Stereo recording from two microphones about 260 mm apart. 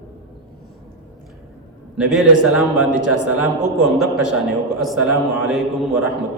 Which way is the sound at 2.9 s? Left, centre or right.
Right.